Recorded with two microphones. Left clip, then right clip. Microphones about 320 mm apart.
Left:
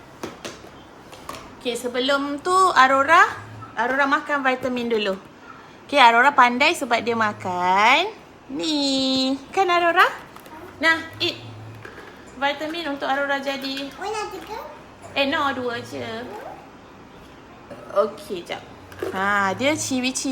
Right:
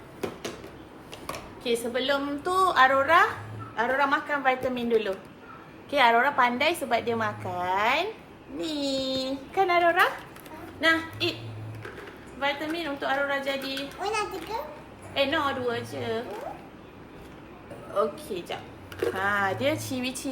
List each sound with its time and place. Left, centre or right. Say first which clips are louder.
1.6 s a woman's voice: left 3 dB; left
12.4 s speech: left 4 dB; left
15.1 s speech: left 4 dB; left
19.1 s a woman's voice: left 7 dB; left